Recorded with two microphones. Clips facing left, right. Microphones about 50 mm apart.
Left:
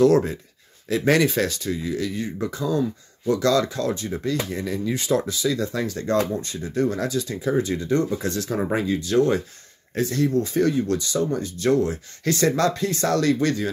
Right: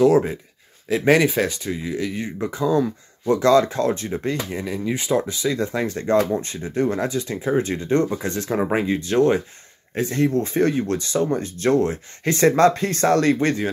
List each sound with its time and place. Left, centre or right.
0.0 s speech: centre; by 4.4 s right
4.5 s speech: right
5.3 s speech: right